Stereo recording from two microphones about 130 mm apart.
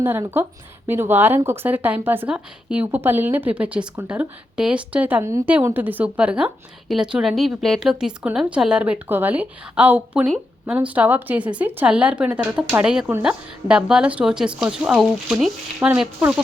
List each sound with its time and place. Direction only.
0.2 s a woman's voice: 20° right (ahead or behind)